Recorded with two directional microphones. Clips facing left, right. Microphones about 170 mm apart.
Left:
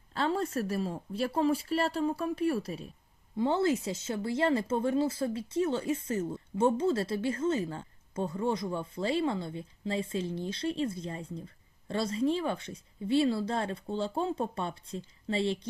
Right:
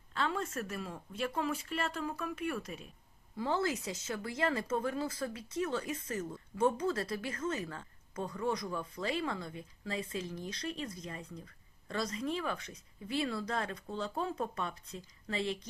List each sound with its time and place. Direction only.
0.1 s speech: 35° left (ahead or behind)